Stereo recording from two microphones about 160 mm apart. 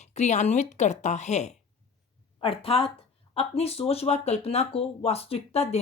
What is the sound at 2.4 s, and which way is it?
Speech, 35° left (ahead or behind).